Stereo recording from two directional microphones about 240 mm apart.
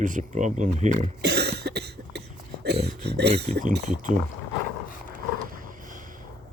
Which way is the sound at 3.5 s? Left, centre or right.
Right.